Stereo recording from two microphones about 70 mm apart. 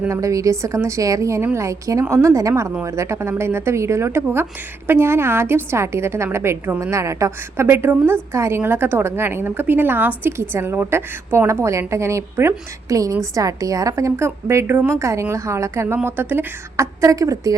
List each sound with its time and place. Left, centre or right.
0.1 s a woman's voice: right
12.9 s a woman's voice: right
14.3 s a woman's voice: right
16.7 s a woman's voice: right